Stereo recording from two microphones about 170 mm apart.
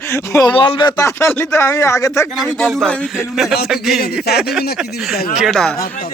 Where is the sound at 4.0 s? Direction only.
70° left (ahead or behind).